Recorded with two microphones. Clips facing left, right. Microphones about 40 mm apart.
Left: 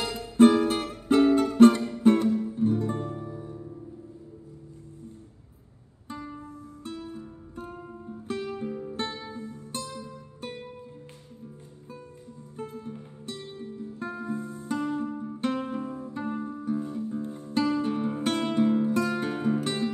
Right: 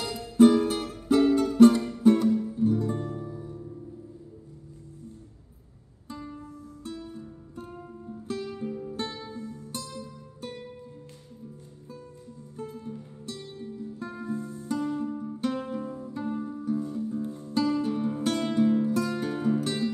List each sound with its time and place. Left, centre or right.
0.4 s music: left
1.8 s music: centre
2.5 s music: left
6.0 s music: left
9.8 s music: left
12.5 s music: left
13.4 s music: centre